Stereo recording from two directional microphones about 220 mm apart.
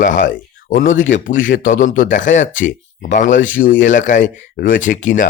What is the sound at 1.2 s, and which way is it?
Speech, 35° left (ahead or behind).